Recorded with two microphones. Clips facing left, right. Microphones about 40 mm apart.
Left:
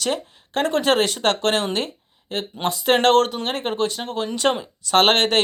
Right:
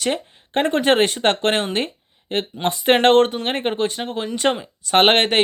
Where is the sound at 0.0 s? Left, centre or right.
Right.